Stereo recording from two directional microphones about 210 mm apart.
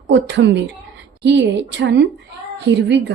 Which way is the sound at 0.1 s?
55° right (ahead or behind).